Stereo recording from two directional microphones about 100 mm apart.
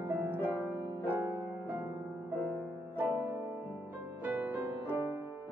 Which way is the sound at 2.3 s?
25° left (ahead or behind).